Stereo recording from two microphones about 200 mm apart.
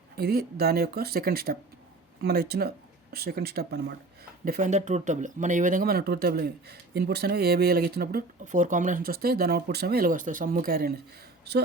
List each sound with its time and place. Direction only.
0.2 s speech: 50° right (ahead or behind)